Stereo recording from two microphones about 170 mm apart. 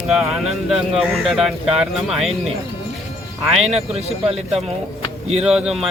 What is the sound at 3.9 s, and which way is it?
Speech, 35° right (ahead or behind).